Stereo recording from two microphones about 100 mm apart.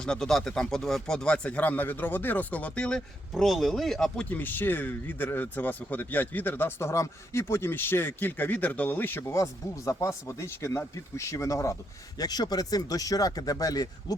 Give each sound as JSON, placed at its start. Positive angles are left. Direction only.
{"t": 0.0, "sound": "speech", "side_deg": 5}
{"t": 4.3, "sound": "speech", "side_deg": 20}